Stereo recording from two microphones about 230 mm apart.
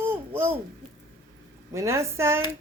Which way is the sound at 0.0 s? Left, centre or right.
Centre.